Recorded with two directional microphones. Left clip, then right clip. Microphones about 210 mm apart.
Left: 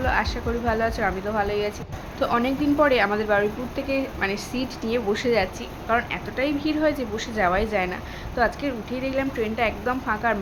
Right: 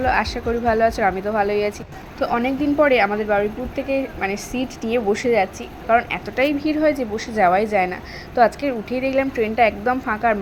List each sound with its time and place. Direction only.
0.0 s a woman's voice: 20° right (ahead or behind)
2.2 s a woman's voice: 10° right (ahead or behind)